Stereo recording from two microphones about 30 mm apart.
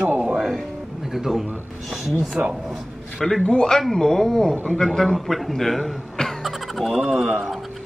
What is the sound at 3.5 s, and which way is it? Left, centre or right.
Speech, left.